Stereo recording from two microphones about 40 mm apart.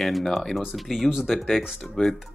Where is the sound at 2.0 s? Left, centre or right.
Left.